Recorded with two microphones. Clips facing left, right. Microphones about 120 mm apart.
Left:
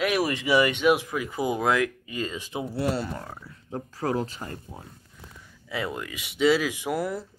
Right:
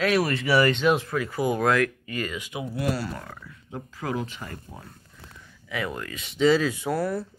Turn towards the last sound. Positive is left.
turn(degrees=15)  # may be behind; listen again after turning